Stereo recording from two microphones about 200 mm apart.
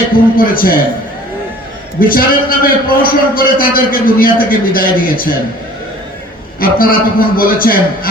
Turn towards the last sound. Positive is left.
turn(degrees=45)  # may be behind; listen again after turning